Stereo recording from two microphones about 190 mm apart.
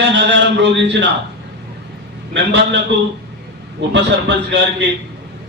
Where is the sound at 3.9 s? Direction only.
70° right (ahead or behind).